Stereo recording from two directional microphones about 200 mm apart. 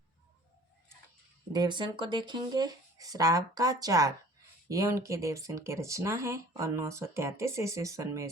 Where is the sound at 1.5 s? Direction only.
20° right (ahead or behind).